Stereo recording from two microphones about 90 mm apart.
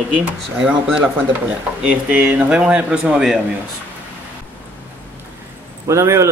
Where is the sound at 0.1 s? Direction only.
10° right (ahead or behind).